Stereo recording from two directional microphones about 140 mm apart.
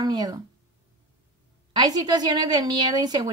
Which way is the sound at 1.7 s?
30° right (ahead or behind).